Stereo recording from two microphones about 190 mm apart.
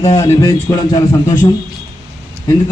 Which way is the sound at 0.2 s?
15° left (ahead or behind).